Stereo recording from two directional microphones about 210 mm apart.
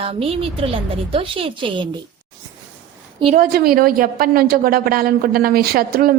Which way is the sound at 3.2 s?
40° right (ahead or behind).